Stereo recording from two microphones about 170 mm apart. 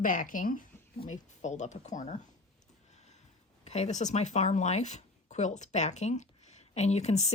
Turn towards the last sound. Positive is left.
turn(degrees=40)  # may be behind; listen again after turning